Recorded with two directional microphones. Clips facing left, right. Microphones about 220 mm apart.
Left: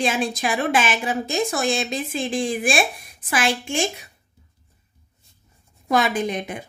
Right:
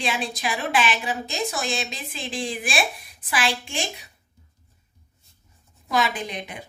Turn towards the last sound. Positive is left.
turn(degrees=45)  # may be behind; listen again after turning